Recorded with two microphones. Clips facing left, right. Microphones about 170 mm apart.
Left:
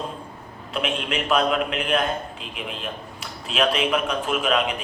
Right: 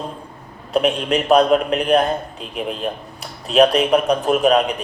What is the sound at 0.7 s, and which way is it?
A man's voice, 40° right (ahead or behind).